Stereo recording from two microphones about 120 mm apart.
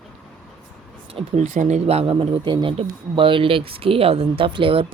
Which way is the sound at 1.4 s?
80° right.